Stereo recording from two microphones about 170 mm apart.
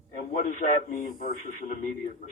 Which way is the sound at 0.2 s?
50° left (ahead or behind).